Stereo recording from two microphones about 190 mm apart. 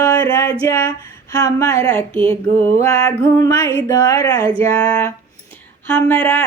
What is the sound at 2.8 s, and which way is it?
Music, 15° left (ahead or behind).